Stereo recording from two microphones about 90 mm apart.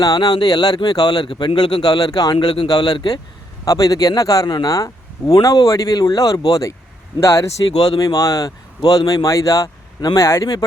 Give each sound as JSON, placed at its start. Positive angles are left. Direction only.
{"t": 0.0, "sound": "speech", "side_deg": 45}